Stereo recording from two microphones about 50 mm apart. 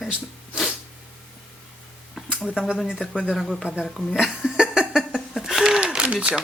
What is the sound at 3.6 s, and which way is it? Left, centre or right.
Speech, centre.